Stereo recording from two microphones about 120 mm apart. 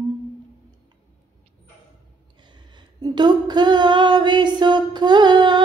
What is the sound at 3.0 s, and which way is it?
Female singing, 35° right (ahead or behind).